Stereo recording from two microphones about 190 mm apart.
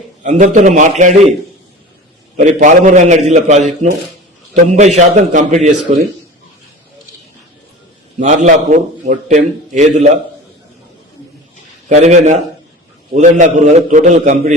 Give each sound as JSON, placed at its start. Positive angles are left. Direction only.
{"t": 0.2, "sound": "a man's voice", "side_deg": -40}
{"t": 2.3, "sound": "a man's voice", "side_deg": -40}
{"t": 8.2, "sound": "a man's voice", "side_deg": -40}
{"t": 11.9, "sound": "a man's voice", "side_deg": -40}